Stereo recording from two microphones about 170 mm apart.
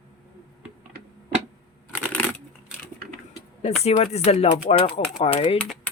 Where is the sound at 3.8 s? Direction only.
40° left (ahead or behind).